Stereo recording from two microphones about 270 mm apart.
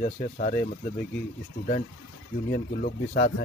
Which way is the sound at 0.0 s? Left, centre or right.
Left.